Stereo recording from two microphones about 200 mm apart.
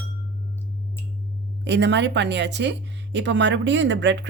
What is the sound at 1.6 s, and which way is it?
Speech, 60° right (ahead or behind).